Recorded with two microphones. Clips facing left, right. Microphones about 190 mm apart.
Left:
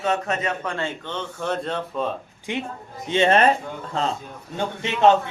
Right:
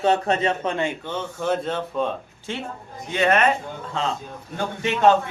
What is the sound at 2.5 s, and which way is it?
Speech, 15° left (ahead or behind).